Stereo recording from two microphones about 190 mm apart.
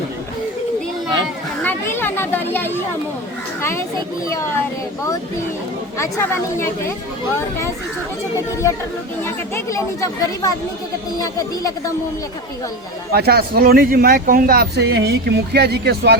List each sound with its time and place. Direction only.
1.6 s speech: 10° left (ahead or behind)
6.0 s speech: 15° left (ahead or behind)
9.2 s speech: 15° left (ahead or behind)
13.1 s speech: 55° right (ahead or behind)